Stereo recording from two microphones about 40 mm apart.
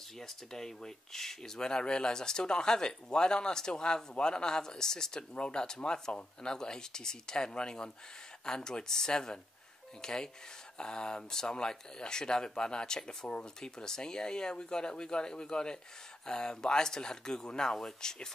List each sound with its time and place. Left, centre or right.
0.2 s speech: centre